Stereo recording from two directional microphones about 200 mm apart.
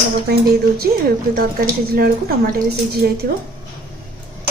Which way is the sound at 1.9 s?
50° right (ahead or behind).